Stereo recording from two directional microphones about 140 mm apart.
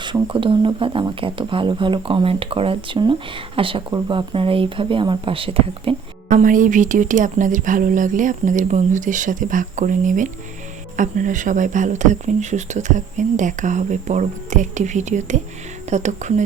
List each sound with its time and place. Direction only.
0.0 s speech: 35° right (ahead or behind)
6.2 s speech: 70° right (ahead or behind)